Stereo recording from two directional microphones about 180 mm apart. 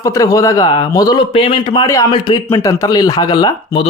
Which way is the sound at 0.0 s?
20° left (ahead or behind).